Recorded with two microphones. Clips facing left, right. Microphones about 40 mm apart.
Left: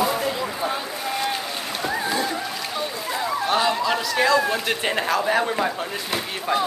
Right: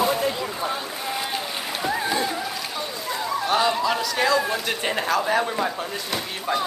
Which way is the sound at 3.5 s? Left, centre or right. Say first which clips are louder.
Even; centre.